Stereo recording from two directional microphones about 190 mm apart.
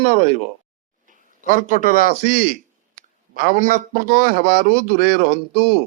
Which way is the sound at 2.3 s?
45° right (ahead or behind).